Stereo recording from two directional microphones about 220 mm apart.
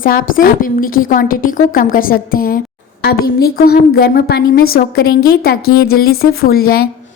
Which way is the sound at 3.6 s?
45° left (ahead or behind).